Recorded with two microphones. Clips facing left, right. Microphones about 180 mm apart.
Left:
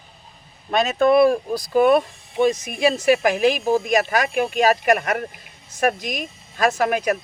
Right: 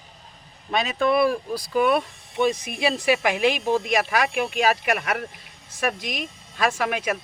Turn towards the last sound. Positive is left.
turn(degrees=45)  # may be behind; listen again after turning